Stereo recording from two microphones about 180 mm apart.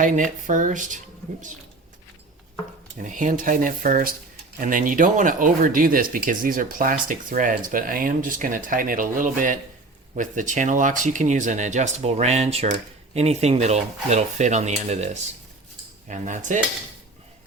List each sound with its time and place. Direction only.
0.0 s speech: 45° right (ahead or behind)
3.0 s speech: 45° right (ahead or behind)